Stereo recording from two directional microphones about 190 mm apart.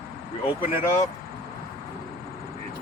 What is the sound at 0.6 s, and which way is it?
Speech, 10° right (ahead or behind).